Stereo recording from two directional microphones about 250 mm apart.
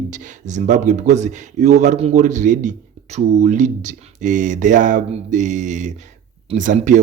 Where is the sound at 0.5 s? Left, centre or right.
Right.